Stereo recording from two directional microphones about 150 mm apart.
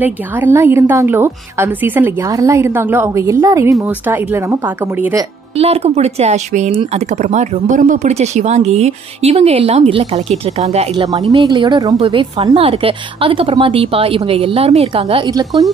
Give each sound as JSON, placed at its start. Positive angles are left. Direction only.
{"t": 0.0, "sound": "a woman's voice", "side_deg": -15}
{"t": 5.6, "sound": "speech", "side_deg": -40}
{"t": 11.4, "sound": "speech", "side_deg": -30}
{"t": 12.0, "sound": "a woman's voice", "side_deg": -35}